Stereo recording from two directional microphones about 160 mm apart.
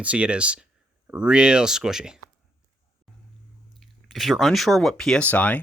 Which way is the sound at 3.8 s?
Centre (ahead or behind).